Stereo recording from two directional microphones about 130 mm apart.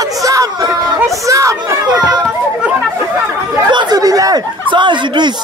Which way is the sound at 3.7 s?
35° right (ahead or behind).